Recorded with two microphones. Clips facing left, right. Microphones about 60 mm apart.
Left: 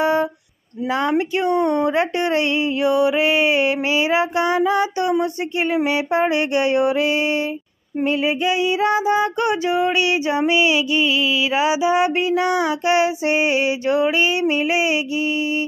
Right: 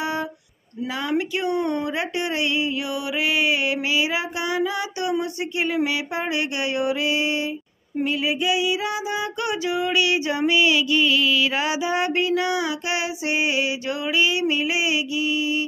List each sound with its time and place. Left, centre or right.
0.9 s female singing: left